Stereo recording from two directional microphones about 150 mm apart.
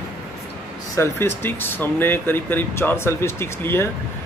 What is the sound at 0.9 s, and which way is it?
Speech, 15° left (ahead or behind).